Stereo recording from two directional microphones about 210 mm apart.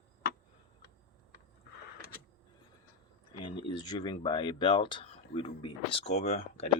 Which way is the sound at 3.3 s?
25° left (ahead or behind).